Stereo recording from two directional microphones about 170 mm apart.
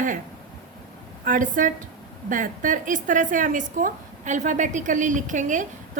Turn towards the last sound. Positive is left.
turn(degrees=-50)  # may be behind; listen again after turning